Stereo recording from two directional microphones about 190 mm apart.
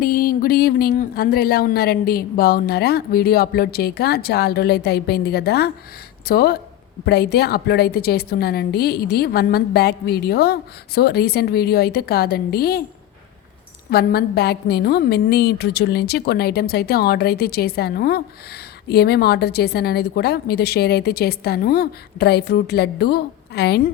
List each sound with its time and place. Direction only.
0.0 s a woman's voice: 50° left (ahead or behind)
13.9 s a woman's voice: 55° left (ahead or behind)